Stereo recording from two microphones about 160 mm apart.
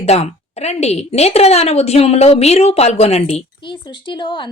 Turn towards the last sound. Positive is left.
turn(degrees=30)  # may be behind; listen again after turning